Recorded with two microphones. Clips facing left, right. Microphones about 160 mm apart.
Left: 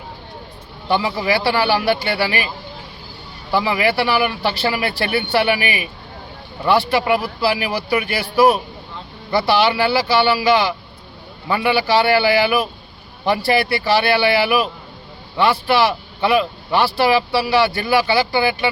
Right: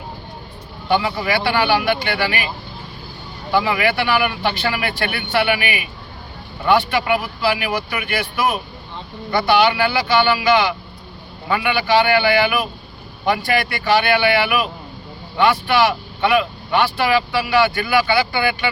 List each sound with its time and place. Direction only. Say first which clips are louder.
1.5 s speech: right 1 dB; 35° left (ahead or behind)
3.5 s speech: even; 30° left (ahead or behind)